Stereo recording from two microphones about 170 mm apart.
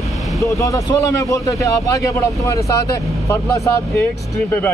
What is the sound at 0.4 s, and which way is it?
A man's voice, 20° left (ahead or behind).